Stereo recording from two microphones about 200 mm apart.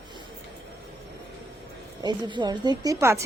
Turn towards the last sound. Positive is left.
turn(degrees=-15)  # may be behind; listen again after turning